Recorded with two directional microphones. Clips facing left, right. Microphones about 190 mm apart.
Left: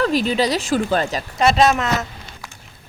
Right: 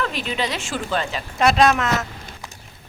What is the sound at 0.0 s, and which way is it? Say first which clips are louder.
Speech: left 7 dB; 40° left (ahead or behind).